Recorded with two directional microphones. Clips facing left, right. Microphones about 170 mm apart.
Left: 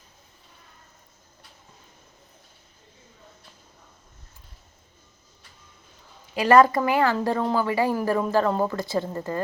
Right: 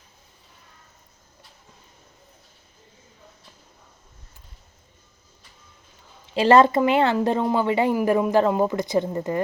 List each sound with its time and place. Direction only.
6.3 s speech: 25° right (ahead or behind)